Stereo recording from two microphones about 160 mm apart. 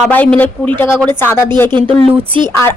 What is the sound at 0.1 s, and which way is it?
Speech, 10° left (ahead or behind).